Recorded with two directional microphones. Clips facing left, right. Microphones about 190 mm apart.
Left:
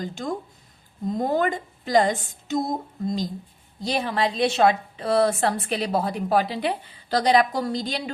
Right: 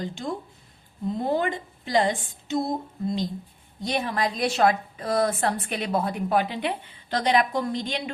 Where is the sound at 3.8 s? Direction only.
35° left (ahead or behind).